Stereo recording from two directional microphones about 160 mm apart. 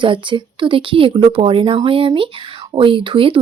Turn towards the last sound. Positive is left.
turn(degrees=-35)  # may be behind; listen again after turning